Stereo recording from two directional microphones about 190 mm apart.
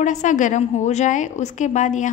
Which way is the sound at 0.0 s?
40° left (ahead or behind).